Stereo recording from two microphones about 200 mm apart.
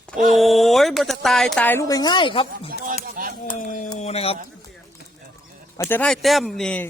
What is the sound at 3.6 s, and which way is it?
Speech, 40° left (ahead or behind).